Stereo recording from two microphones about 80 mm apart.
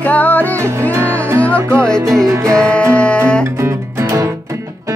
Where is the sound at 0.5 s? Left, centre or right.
Right.